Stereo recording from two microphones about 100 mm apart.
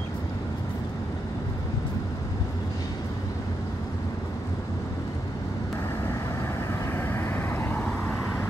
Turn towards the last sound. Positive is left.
turn(degrees=20)  # may be behind; listen again after turning